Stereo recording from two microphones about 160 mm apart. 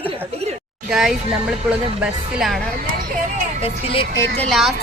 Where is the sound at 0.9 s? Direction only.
Centre (ahead or behind).